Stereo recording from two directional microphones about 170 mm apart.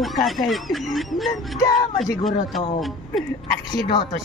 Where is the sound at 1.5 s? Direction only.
20° left (ahead or behind).